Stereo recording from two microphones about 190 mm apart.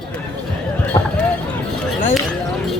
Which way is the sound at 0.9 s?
25° left (ahead or behind).